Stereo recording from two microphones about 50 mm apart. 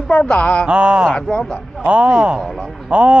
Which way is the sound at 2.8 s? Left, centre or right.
Right.